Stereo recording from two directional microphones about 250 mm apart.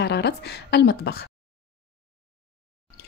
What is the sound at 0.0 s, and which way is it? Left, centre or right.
A woman's voice, left.